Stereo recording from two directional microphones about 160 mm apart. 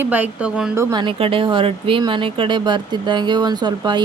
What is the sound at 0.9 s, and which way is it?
A woman's voice, 30° right (ahead or behind).